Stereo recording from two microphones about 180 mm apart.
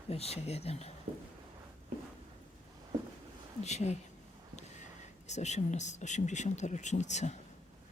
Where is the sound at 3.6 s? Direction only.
40° left (ahead or behind).